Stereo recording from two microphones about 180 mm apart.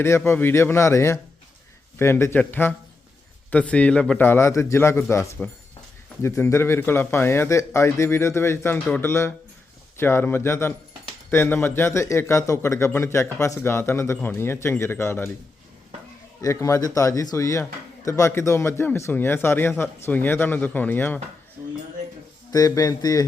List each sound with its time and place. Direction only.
0.3 s speech: 10° left (ahead or behind)
16.4 s speech: 15° left (ahead or behind)
22.5 s speech: 20° left (ahead or behind)